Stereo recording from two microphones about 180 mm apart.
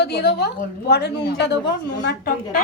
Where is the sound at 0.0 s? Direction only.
65° left (ahead or behind).